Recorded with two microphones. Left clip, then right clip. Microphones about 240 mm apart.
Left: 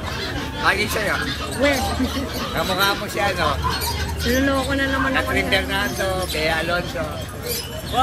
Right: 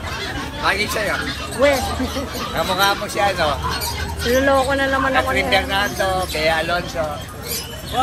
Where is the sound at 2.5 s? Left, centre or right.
Centre.